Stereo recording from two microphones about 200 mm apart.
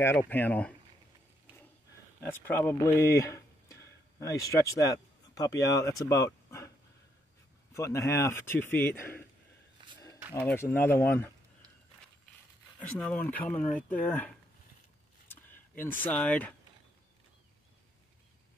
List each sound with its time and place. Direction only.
0.0 s speech: 10° left (ahead or behind)
2.2 s speech: 10° left (ahead or behind)
7.7 s speech: 15° left (ahead or behind)
10.4 s speech: 10° left (ahead or behind)
12.7 s speech: 5° left (ahead or behind)
15.2 s a sound: 10° left (ahead or behind)
15.8 s speech: 10° left (ahead or behind)